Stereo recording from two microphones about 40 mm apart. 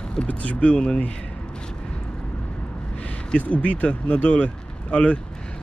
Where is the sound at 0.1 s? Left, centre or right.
Left.